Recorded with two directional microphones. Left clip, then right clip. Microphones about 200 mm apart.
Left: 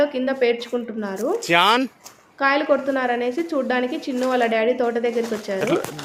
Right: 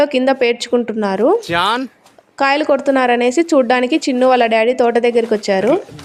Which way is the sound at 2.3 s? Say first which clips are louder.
Right 5 dB; 40° right (ahead or behind).